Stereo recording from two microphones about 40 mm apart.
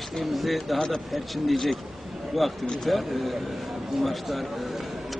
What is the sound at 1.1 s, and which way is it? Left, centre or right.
Speech, centre.